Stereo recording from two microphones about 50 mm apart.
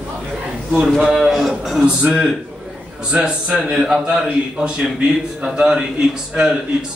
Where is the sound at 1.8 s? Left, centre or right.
Centre.